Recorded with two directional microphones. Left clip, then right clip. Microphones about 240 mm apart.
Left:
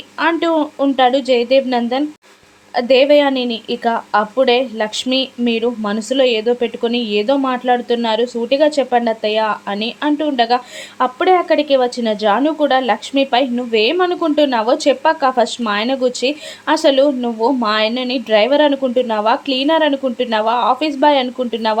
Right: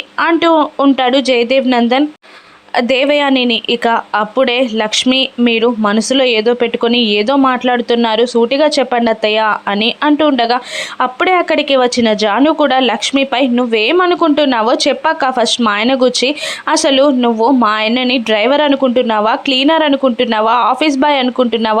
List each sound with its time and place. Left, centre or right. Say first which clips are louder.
0.2 s speech: right 5 dB; centre